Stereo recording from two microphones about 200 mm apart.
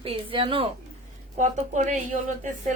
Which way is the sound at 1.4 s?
40° right (ahead or behind).